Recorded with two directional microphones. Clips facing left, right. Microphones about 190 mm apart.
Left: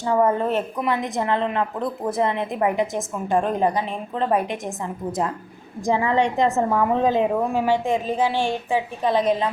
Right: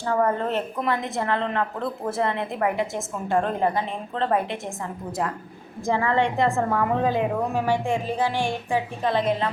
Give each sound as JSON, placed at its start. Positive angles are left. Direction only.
{"t": 0.0, "sound": "a woman's voice", "side_deg": 15}
{"t": 5.8, "sound": "a woman's voice", "side_deg": 15}